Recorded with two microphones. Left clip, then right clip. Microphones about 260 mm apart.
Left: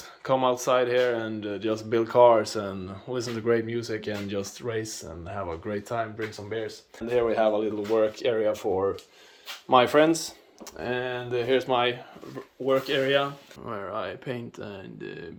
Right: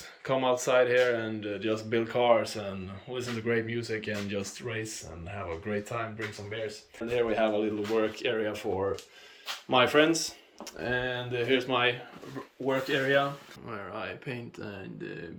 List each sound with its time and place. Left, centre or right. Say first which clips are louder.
0.3 s speech: left 3 dB; centre